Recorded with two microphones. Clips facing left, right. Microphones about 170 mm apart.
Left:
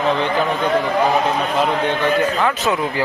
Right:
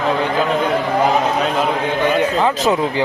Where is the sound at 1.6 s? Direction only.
15° right (ahead or behind).